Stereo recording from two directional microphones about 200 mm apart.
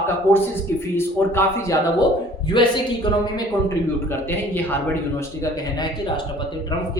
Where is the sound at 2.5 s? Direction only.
25° left (ahead or behind).